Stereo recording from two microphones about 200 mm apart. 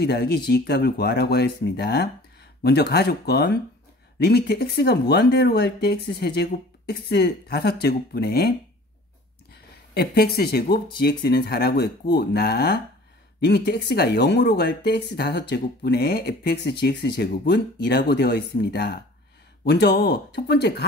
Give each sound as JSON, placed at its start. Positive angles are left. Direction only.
{"t": 0.0, "sound": "speech", "side_deg": 50}